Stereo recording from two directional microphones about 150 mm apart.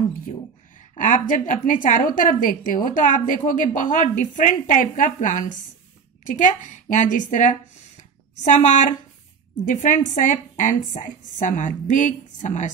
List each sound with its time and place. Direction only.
0.9 s a woman's voice: 60° left (ahead or behind)